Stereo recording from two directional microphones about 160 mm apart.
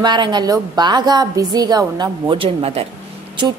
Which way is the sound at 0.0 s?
30° right (ahead or behind).